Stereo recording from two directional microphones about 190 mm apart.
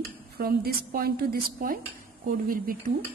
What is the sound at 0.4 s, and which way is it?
A woman's voice, 50° right (ahead or behind).